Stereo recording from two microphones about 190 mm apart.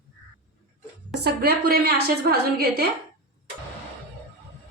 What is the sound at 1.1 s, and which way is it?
A woman's voice, 55° right (ahead or behind).